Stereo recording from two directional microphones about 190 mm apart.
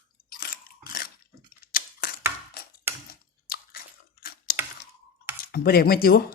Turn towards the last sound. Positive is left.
turn(degrees=50)  # may be behind; listen again after turning